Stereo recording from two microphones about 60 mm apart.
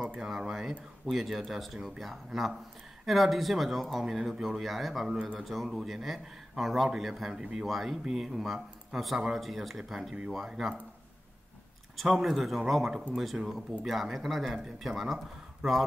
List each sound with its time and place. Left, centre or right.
0.2 s speech: centre
12.0 s speech: centre